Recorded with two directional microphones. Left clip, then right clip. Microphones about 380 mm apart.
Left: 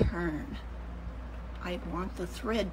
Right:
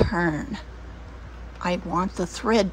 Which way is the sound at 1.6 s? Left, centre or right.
Centre.